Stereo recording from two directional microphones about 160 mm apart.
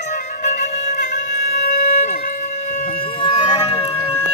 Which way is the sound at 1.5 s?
85° left.